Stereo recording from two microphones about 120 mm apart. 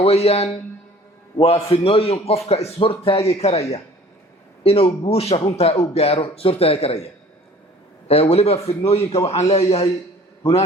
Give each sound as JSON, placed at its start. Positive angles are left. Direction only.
{"t": 0.0, "sound": "a man's voice", "side_deg": 60}
{"t": 8.0, "sound": "a man's voice", "side_deg": 55}